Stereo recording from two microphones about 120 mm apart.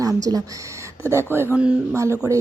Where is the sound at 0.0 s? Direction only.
30° right (ahead or behind).